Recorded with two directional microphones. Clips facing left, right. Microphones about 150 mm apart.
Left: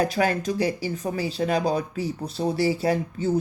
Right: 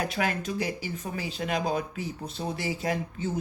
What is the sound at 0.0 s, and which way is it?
Speech, 35° left (ahead or behind).